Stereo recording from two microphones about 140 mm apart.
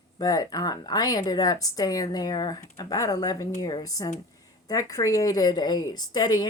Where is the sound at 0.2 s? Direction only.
25° left (ahead or behind).